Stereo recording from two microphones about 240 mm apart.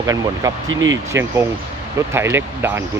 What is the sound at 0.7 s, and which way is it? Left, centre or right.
Speech, right.